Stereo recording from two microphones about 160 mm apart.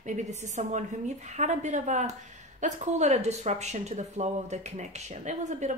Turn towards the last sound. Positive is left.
turn(degrees=-45)  # may be behind; listen again after turning